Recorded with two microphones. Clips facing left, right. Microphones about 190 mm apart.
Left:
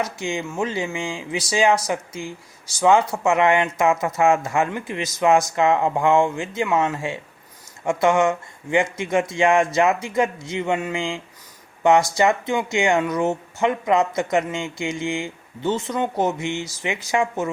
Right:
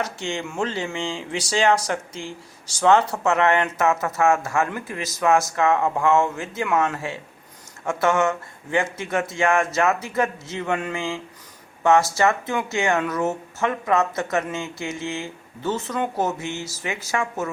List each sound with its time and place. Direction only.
0.0 s speech: 10° left (ahead or behind)